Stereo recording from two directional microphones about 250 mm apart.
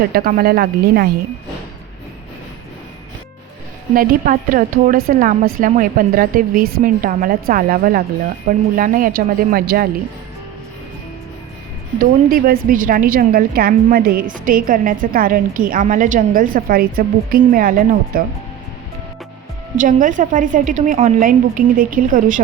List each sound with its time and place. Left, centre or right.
0.1 s a woman's voice: right
3.9 s a woman's voice: right
11.9 s a woman's voice: right
19.8 s a woman's voice: right